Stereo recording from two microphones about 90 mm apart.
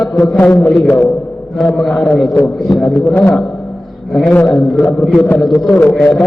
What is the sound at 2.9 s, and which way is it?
Speech, 20° left (ahead or behind).